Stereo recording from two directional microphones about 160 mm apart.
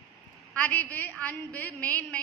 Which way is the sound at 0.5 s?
10° left (ahead or behind).